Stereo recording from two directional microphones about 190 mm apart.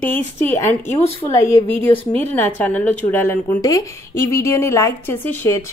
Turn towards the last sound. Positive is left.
turn(degrees=15)  # may be behind; listen again after turning